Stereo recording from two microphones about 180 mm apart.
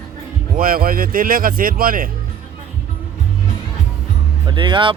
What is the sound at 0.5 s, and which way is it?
Speech, 55° right (ahead or behind).